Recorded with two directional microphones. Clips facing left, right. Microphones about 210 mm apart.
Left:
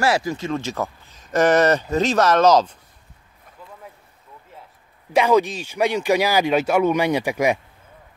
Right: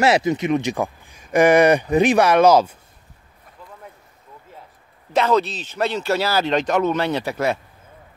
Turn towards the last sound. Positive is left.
turn(degrees=15)  # may be behind; listen again after turning